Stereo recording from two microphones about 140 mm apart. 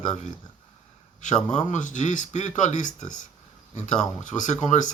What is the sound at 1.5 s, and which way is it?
Speech, 65° left (ahead or behind).